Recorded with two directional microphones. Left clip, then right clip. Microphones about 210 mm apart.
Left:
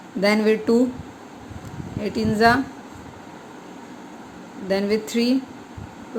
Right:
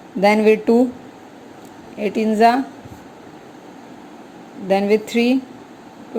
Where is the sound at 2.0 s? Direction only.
15° right (ahead or behind).